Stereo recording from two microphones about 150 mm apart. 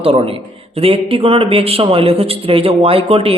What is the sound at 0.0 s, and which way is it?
Speech, 40° right (ahead or behind).